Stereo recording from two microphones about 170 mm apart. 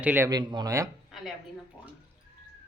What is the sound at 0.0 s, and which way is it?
Speech, 10° right (ahead or behind).